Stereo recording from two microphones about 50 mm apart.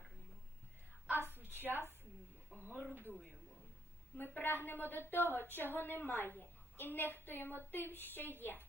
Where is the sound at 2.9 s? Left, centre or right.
Right.